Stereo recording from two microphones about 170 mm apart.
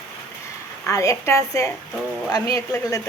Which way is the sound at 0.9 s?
20° left (ahead or behind).